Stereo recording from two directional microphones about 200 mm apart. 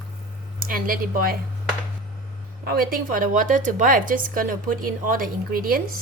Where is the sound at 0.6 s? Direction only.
45° right (ahead or behind).